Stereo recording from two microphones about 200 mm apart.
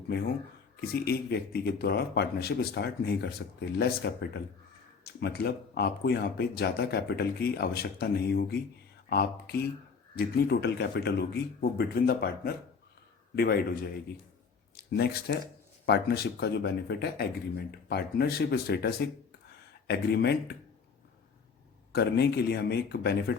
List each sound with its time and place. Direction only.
0.8 s a man's voice: 55° left (ahead or behind)
21.9 s a man's voice: 55° left (ahead or behind)